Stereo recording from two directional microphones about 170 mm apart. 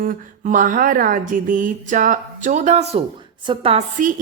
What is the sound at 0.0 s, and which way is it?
Speech, 50° right (ahead or behind).